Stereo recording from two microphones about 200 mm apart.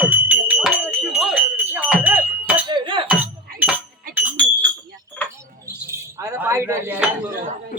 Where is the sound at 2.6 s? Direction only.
25° right (ahead or behind).